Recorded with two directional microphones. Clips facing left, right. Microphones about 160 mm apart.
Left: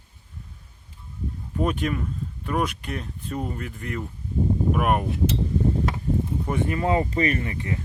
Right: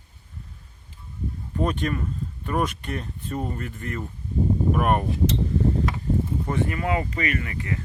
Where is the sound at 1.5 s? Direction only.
5° left (ahead or behind).